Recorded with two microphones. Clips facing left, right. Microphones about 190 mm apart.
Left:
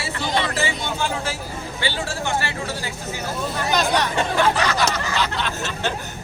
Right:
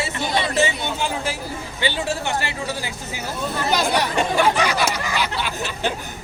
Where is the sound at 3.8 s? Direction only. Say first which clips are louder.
Left 1 dB; 10° right (ahead or behind).